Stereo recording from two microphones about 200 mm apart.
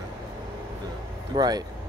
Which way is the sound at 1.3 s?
20° right (ahead or behind).